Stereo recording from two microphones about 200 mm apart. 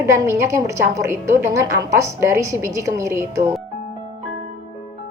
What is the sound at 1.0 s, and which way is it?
A woman's voice, 15° right (ahead or behind).